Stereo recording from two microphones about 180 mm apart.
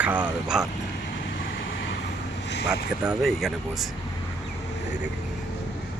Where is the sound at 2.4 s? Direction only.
70° left (ahead or behind).